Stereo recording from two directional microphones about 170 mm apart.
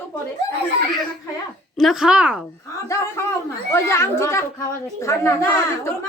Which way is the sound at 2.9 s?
15° left (ahead or behind).